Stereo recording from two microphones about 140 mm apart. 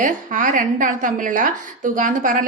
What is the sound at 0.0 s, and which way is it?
A woman's voice, 65° right (ahead or behind).